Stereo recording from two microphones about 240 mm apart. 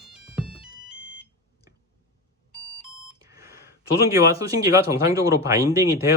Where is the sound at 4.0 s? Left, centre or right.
Centre.